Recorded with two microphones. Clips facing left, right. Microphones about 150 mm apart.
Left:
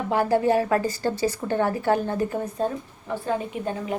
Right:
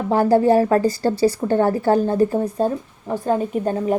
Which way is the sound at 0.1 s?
40° right (ahead or behind).